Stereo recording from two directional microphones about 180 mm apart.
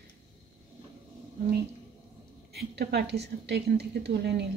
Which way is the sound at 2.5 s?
65° right (ahead or behind).